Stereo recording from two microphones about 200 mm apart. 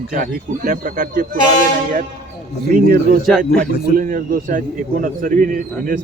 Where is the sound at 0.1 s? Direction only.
45° right (ahead or behind).